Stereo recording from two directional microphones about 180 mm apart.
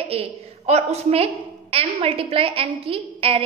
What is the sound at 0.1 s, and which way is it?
A woman's voice, 35° right (ahead or behind).